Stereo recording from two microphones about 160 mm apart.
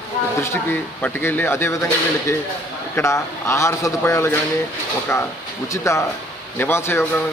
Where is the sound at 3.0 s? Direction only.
20° left (ahead or behind).